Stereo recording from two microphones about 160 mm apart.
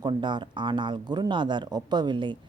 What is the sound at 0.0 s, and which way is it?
Speech, 30° right (ahead or behind).